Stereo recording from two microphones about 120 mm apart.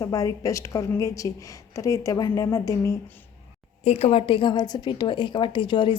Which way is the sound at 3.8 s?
60° left (ahead or behind).